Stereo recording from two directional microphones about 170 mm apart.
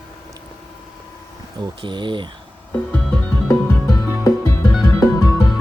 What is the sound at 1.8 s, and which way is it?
Speech, 30° right (ahead or behind).